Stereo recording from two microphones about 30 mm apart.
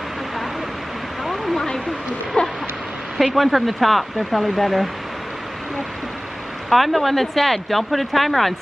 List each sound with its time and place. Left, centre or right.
2.4 s a sound: left
3.3 s speech: centre
6.7 s speech: centre